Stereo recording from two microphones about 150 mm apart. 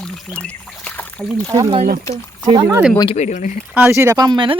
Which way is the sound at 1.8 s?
60° right (ahead or behind).